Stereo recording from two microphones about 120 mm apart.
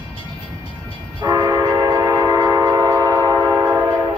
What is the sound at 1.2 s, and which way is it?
Train, 35° right (ahead or behind).